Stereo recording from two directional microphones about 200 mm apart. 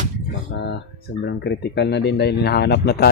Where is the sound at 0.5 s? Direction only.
55° left (ahead or behind).